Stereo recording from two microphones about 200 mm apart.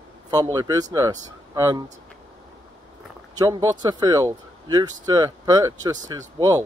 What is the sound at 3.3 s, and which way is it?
Speech, 20° right (ahead or behind).